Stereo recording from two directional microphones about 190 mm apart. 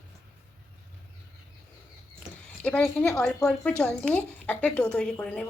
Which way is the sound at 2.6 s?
5° left (ahead or behind).